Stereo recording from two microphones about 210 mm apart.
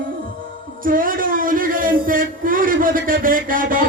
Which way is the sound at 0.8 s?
40° right (ahead or behind).